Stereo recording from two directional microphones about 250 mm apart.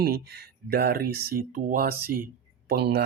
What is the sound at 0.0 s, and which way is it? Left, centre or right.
Speech, right.